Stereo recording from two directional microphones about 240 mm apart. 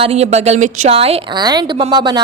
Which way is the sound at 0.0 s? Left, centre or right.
Right.